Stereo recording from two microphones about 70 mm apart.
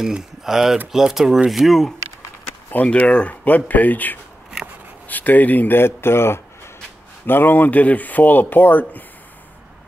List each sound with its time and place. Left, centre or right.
0.0 s speech: centre
2.7 s speech: left